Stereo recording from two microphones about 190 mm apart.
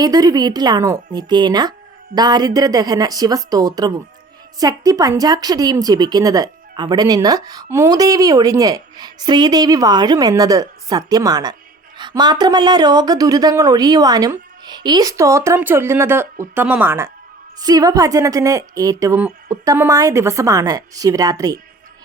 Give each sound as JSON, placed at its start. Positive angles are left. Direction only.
{"t": 0.0, "sound": "a woman's voice", "side_deg": -20}